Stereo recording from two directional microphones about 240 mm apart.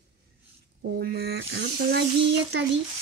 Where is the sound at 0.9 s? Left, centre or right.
Right.